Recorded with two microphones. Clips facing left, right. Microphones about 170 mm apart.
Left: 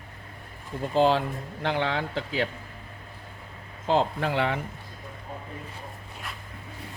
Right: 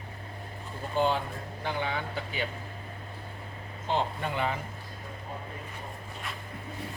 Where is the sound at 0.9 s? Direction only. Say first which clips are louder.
Left 6 dB; 90° left.